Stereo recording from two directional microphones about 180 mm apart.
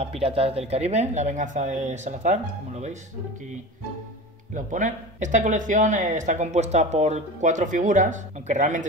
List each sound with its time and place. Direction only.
0.0 s speech: 35° right (ahead or behind)
4.6 s speech: 45° right (ahead or behind)